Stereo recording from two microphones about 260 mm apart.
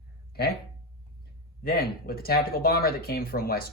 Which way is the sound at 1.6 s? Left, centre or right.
Left.